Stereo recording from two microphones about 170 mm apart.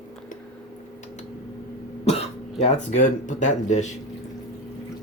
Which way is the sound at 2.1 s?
35° left (ahead or behind).